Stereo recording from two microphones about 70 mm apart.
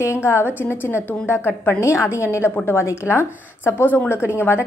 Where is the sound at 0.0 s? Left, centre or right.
Left.